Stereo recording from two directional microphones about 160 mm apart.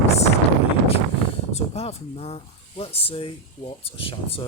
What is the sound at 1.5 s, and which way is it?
Speech, 40° left (ahead or behind).